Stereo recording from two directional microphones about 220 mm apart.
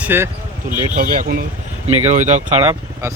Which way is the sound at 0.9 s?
40° right (ahead or behind).